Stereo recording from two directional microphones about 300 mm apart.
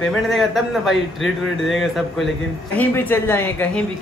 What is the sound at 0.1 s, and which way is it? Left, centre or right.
A man's voice, centre.